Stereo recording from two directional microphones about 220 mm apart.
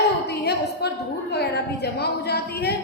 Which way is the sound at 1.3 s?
50° left (ahead or behind).